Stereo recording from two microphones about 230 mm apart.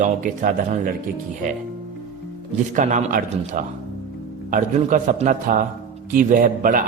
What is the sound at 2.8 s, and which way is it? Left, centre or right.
Speech, right.